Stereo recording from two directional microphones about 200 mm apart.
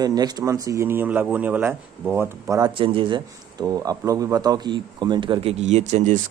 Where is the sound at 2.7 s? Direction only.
25° right (ahead or behind).